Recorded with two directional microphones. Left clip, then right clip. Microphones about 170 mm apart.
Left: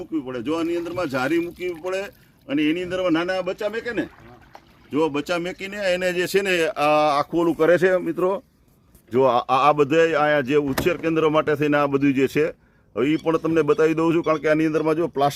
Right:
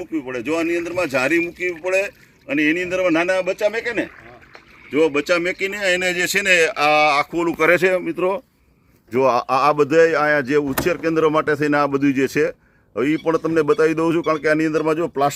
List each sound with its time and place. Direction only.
0.0 s speech: 45° left (ahead or behind)
4.5 s speech: 75° left (ahead or behind); by 7.3 s 50° left (ahead or behind)
7.4 s speech: 25° left (ahead or behind)
9.1 s a man's voice: 5° left (ahead or behind)